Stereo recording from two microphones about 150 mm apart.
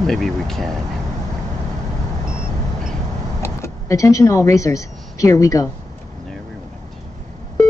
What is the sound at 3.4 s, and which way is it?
Speech, 20° left (ahead or behind).